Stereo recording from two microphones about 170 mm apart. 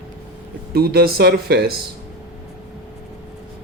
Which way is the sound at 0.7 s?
65° right (ahead or behind).